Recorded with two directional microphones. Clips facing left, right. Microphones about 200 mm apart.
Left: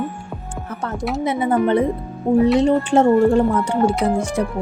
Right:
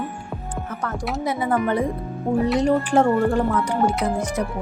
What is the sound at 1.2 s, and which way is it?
Speech, 25° left (ahead or behind).